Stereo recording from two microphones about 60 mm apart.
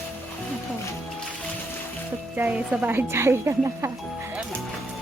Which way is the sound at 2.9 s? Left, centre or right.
Right.